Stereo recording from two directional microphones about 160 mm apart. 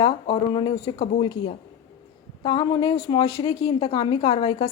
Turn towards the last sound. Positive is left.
turn(degrees=30)  # may be behind; listen again after turning